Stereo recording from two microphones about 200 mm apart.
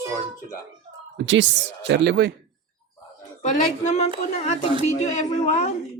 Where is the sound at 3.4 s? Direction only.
35° left (ahead or behind).